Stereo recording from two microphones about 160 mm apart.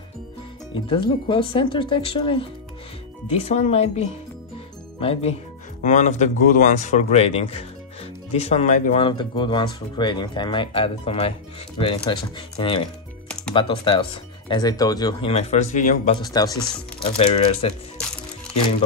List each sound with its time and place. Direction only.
0.8 s speech: 35° left (ahead or behind)
5.8 s speech: 50° left (ahead or behind)
8.9 s speech: 30° left (ahead or behind)
15.3 s speech: 50° left (ahead or behind)
16.2 s speech: 25° left (ahead or behind)
17.2 s speech: 40° left (ahead or behind)